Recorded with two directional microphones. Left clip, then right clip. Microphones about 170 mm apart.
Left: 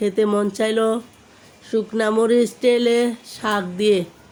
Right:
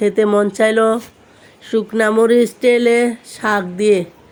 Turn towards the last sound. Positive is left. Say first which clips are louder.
# right 4 dB
turn(degrees=-5)  # may be behind; listen again after turning